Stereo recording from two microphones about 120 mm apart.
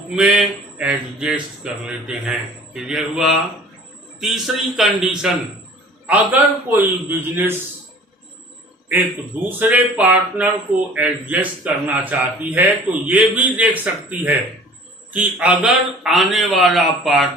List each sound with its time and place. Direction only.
0.2 s a man's voice: 5° right (ahead or behind)
6.1 s a man's voice: 15° right (ahead or behind)
9.6 s a man's voice: 15° right (ahead or behind)